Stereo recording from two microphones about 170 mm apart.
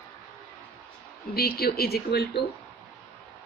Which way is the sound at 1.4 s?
65° left (ahead or behind).